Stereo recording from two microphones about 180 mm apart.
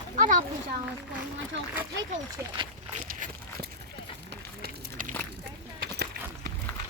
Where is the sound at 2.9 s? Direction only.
45° right (ahead or behind).